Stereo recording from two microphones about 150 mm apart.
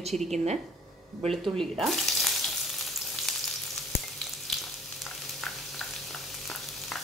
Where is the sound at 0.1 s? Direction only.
50° right (ahead or behind).